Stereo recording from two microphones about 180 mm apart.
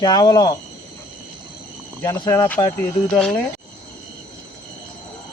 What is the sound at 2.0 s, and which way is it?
Speech, 15° left (ahead or behind).